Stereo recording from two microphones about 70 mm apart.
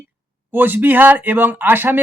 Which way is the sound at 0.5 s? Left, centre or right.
Right.